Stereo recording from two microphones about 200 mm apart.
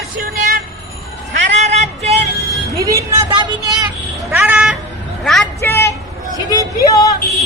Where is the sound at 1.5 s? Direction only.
35° right (ahead or behind).